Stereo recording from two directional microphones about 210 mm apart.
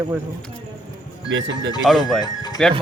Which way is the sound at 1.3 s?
65° right (ahead or behind).